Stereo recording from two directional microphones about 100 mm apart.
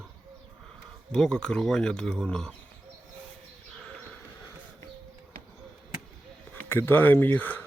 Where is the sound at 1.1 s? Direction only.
10° left (ahead or behind).